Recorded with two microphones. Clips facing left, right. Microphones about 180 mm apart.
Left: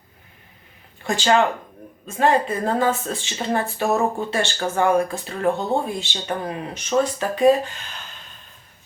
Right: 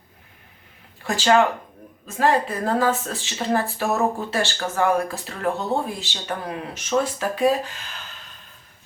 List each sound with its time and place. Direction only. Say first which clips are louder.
1.0 s speech: even; centre (ahead or behind)